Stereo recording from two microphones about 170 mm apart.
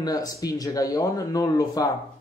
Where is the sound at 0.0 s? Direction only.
20° left (ahead or behind).